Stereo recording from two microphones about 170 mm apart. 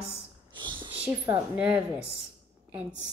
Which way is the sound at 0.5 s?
30° right (ahead or behind).